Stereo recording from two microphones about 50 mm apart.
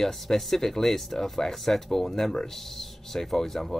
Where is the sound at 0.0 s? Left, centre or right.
Centre.